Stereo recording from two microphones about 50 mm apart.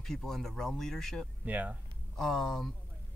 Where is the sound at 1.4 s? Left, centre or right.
Right.